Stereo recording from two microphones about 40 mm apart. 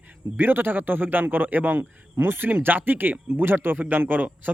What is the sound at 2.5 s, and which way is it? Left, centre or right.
Speech, right.